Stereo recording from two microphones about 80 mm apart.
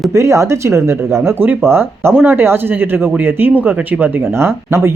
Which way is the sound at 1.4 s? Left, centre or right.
Right.